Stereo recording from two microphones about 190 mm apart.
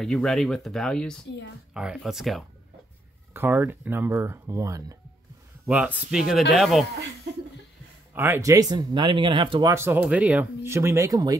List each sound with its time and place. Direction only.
0.0 s speech: 5° left (ahead or behind)
3.3 s speech: 10° right (ahead or behind)
8.1 s speech: 10° right (ahead or behind)